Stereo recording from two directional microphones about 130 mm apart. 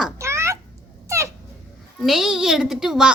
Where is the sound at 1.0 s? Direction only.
25° right (ahead or behind).